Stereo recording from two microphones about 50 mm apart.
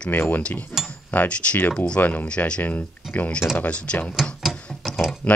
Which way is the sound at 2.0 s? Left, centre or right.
Left.